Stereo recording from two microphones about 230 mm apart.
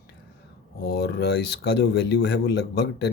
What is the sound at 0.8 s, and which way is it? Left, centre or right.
Speech, left.